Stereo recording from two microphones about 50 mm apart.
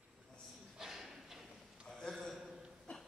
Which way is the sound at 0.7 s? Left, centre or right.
Centre.